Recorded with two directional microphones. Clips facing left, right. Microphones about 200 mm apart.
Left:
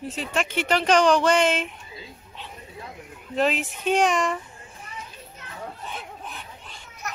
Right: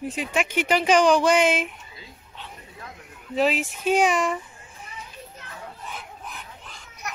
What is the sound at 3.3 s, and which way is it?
Speech, 5° right (ahead or behind).